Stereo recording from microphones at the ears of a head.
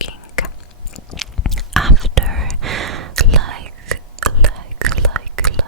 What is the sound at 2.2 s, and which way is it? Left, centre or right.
Whispering, right.